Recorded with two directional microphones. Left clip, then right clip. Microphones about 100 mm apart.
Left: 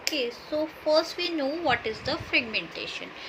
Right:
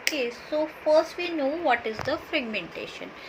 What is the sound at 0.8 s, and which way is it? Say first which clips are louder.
Speech: right 3 dB; 55° left (ahead or behind).